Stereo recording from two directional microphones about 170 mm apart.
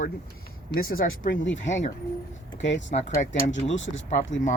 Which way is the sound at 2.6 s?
90° left.